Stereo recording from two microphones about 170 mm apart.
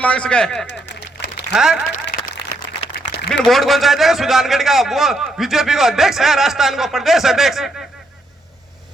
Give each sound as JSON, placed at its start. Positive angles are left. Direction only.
{"t": 0.0, "sound": "a man's voice", "side_deg": 5}
{"t": 0.7, "sound": "a sound", "side_deg": 90}
{"t": 1.5, "sound": "a man's voice", "side_deg": -5}
{"t": 3.2, "sound": "a man's voice", "side_deg": 0}